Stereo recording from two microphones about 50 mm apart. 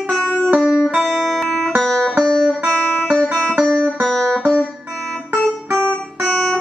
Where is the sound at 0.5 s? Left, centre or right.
Centre.